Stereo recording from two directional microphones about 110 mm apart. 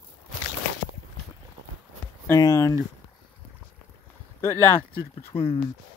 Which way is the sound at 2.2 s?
30° left (ahead or behind).